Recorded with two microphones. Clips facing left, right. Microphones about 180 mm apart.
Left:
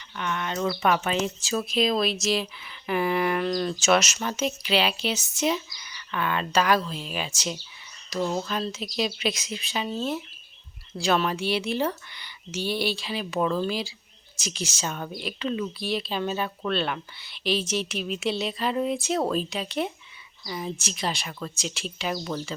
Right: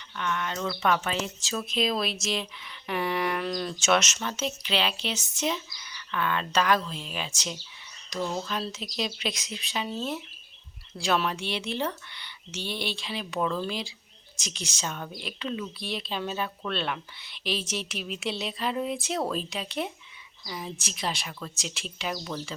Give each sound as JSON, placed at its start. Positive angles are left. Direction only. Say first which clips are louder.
{"t": 0.2, "sound": "speech", "louder": "left 3 dB", "side_deg": 20}
{"t": 1.7, "sound": "speech", "louder": "left 4 dB", "side_deg": 0}